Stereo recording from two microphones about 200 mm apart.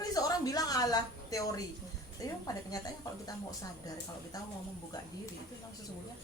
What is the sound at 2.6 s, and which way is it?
Speech, 20° left (ahead or behind).